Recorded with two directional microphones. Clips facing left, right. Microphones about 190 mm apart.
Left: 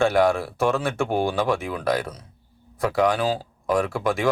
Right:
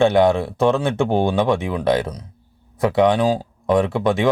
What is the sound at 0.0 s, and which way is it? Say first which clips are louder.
Speech: right 4 dB; 20° right (ahead or behind).